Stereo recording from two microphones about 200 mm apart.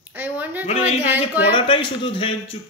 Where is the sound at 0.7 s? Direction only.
35° left (ahead or behind).